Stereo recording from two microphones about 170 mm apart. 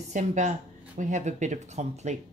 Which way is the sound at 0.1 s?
45° right (ahead or behind).